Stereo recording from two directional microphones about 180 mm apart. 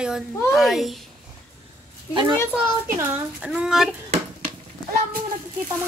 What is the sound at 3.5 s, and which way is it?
Speech, centre (ahead or behind).